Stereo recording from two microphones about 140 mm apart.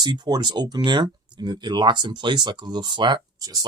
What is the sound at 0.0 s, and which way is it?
Speech, 30° right (ahead or behind).